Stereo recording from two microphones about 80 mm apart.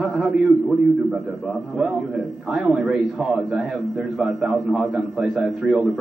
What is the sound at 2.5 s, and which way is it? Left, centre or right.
A man's voice, centre.